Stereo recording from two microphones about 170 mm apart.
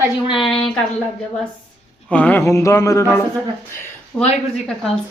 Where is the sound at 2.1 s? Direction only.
10° left (ahead or behind).